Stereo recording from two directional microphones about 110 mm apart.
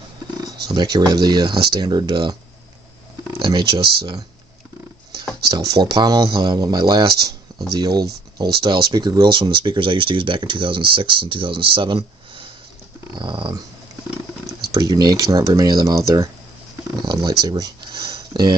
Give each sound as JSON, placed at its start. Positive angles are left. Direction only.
{"t": 0.7, "sound": "speech", "side_deg": -40}
{"t": 3.3, "sound": "speech", "side_deg": -50}
{"t": 5.5, "sound": "speech", "side_deg": -35}
{"t": 14.7, "sound": "speech", "side_deg": -35}